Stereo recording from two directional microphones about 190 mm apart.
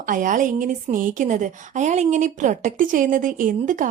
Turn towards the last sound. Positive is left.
turn(degrees=-45)  # may be behind; listen again after turning